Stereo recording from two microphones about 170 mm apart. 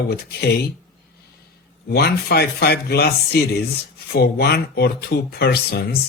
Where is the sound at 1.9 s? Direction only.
70° left (ahead or behind).